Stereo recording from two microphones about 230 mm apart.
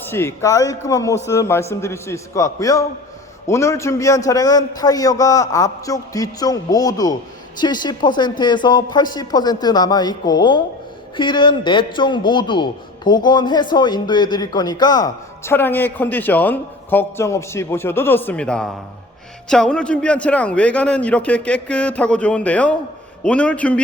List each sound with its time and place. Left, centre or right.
0.0 s a man's voice: centre